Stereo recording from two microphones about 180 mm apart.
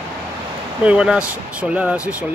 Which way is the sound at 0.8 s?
5° right (ahead or behind).